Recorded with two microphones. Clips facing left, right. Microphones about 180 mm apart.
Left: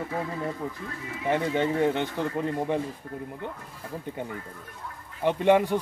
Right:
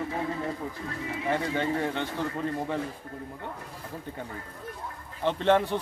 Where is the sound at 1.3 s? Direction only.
20° left (ahead or behind).